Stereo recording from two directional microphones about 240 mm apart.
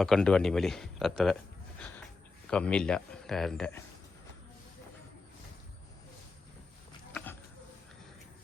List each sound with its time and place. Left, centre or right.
0.0 s a man's voice: centre
2.5 s a man's voice: centre